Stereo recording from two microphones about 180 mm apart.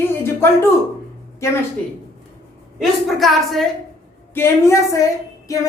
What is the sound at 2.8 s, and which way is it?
Speech, centre (ahead or behind).